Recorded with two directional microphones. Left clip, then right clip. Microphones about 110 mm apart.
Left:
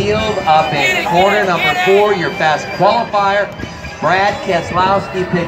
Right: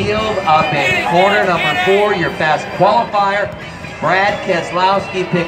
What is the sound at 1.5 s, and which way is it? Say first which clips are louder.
Speech: left 1 dB; 35° left (ahead or behind).